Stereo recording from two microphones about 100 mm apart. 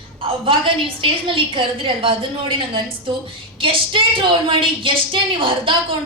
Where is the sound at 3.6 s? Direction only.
60° right (ahead or behind).